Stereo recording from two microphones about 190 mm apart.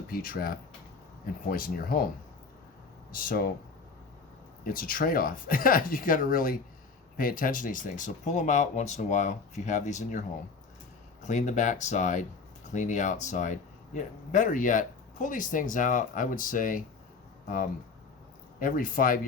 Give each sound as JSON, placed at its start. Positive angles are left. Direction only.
{"t": 0.1, "sound": "speech", "side_deg": 50}
{"t": 3.1, "sound": "speech", "side_deg": 50}
{"t": 4.6, "sound": "speech", "side_deg": 50}
{"t": 18.6, "sound": "speech", "side_deg": 45}